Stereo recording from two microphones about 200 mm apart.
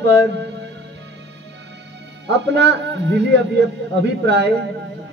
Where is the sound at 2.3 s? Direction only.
60° right (ahead or behind).